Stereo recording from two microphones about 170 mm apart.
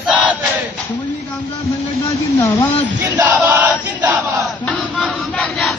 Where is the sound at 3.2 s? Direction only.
10° right (ahead or behind).